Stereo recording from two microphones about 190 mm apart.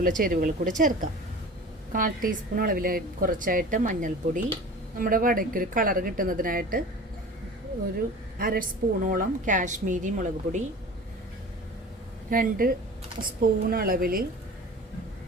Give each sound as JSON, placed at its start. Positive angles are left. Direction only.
{"t": 0.0, "sound": "speech", "side_deg": -45}
{"t": 8.4, "sound": "speech", "side_deg": -45}
{"t": 12.3, "sound": "speech", "side_deg": -50}